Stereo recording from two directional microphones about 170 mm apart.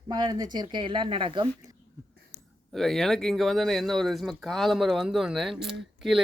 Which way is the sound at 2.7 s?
Centre (ahead or behind).